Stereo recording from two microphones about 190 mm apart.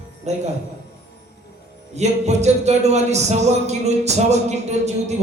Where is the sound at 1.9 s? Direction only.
35° right (ahead or behind).